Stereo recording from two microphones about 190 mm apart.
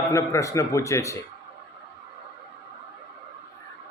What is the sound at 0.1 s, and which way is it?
A man's voice, 15° left (ahead or behind).